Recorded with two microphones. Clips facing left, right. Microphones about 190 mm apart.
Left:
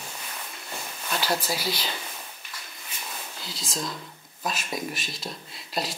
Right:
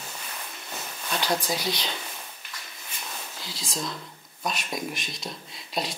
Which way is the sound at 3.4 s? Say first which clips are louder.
Even; centre (ahead or behind).